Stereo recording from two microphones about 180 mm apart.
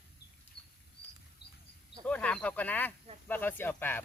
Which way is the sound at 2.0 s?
5° left (ahead or behind).